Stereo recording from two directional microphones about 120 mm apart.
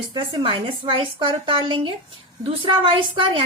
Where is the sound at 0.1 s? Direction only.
40° right (ahead or behind).